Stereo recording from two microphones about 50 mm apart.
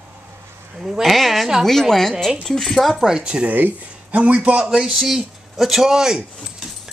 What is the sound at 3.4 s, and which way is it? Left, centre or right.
A woman's voice, right.